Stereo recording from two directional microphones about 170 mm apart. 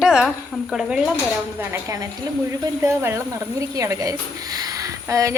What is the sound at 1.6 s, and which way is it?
Speech, 15° right (ahead or behind).